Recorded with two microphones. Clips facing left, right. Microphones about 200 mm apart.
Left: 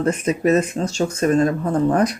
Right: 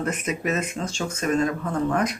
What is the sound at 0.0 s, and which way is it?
Speech, 30° left (ahead or behind).